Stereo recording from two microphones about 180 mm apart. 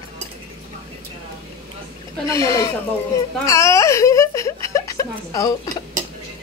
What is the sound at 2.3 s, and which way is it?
Speech, 15° left (ahead or behind).